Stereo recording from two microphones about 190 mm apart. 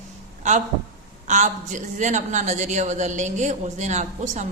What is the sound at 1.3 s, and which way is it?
A woman's voice, 40° right (ahead or behind).